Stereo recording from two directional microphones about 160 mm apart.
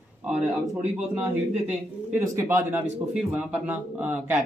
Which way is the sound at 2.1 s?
20° right (ahead or behind).